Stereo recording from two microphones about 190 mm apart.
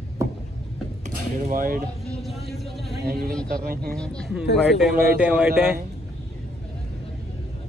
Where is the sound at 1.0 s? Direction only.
45° right (ahead or behind).